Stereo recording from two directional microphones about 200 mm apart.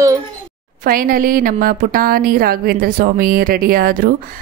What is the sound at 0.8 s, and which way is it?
A woman's voice, 45° right (ahead or behind).